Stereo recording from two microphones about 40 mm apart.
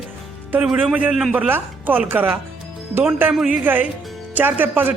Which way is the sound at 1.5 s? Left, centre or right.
Right.